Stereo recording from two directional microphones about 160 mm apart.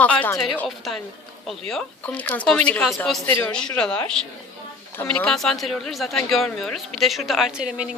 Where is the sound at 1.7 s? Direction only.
5° left (ahead or behind).